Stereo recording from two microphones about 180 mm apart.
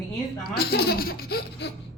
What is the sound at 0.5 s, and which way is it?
Speech, 60° left (ahead or behind).